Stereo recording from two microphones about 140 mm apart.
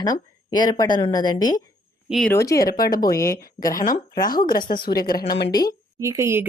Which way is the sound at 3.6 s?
85° left.